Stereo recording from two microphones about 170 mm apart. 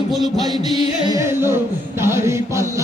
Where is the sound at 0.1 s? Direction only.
Centre (ahead or behind).